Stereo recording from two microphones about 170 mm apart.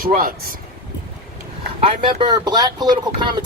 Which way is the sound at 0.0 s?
55° right (ahead or behind).